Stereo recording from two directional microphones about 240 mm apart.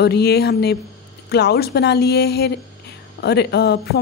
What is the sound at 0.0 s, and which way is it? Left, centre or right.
A woman's voice, left.